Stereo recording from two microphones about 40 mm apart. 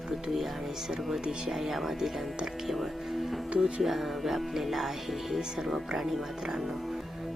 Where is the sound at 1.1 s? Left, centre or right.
Centre.